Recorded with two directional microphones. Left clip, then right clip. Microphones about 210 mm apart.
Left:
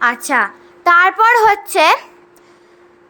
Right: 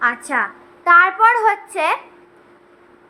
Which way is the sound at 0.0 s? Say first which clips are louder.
Left 4 dB; 40° left (ahead or behind).